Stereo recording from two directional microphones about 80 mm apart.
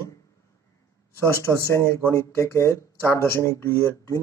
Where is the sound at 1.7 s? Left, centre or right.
Left.